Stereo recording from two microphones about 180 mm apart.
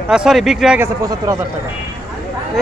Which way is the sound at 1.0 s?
20° right (ahead or behind).